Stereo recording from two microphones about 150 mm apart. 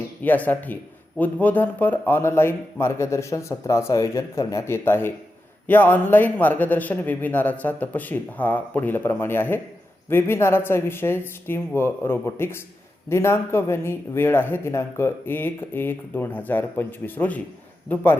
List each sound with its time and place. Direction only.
0.2 s a man's voice: 10° left (ahead or behind)